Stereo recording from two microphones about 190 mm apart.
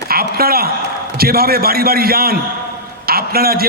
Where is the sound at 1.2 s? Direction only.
55° right (ahead or behind).